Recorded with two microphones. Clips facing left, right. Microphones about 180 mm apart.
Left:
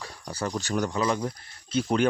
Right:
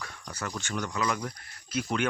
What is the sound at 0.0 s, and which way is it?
Speech, 30° left (ahead or behind).